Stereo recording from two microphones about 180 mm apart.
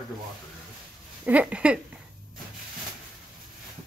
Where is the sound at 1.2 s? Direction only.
5° right (ahead or behind).